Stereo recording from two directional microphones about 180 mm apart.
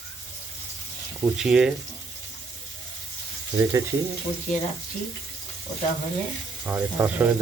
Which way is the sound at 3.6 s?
20° right (ahead or behind).